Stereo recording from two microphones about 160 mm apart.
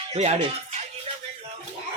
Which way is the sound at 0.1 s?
40° right (ahead or behind).